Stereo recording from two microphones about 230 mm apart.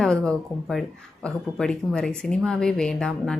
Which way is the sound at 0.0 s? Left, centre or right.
Centre.